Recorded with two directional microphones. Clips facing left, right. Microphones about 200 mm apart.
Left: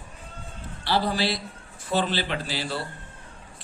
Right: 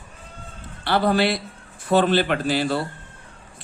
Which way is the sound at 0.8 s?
55° right (ahead or behind).